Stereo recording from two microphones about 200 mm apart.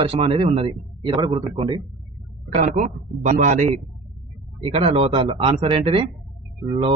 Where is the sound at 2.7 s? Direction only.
40° right (ahead or behind).